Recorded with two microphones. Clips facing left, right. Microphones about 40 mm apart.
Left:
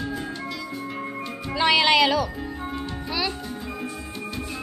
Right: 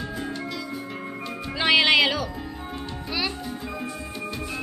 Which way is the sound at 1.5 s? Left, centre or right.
Centre.